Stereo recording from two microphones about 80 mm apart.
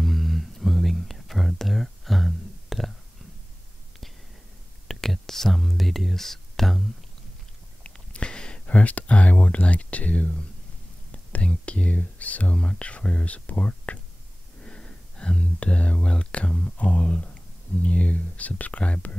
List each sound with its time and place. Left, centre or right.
0.0 s whispering: centre
4.8 s whispering: centre
7.8 s a sound: centre
11.1 s speech: centre
14.6 s a sound: centre
16.7 s speech: centre